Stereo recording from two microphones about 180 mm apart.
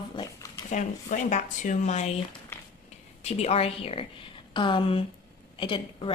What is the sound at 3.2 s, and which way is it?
A woman's voice, 35° left (ahead or behind).